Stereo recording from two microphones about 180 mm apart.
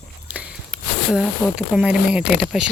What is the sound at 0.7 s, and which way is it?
Speech, 5° right (ahead or behind).